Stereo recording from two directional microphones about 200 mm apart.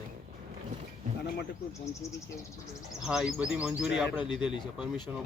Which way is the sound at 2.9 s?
5° right (ahead or behind).